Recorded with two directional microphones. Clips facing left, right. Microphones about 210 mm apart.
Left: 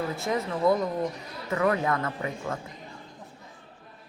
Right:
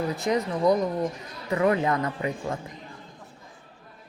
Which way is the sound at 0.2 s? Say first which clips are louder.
Right 2 dB; 15° right (ahead or behind).